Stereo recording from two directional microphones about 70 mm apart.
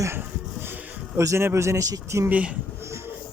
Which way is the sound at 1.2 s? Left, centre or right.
Right.